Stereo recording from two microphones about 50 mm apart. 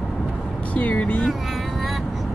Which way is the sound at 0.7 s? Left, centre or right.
Left.